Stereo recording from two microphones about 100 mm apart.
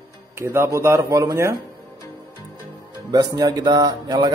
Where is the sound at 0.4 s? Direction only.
25° right (ahead or behind).